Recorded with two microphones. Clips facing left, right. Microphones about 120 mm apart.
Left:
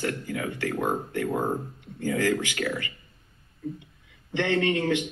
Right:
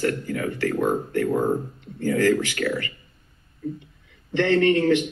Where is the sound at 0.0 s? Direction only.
20° left (ahead or behind).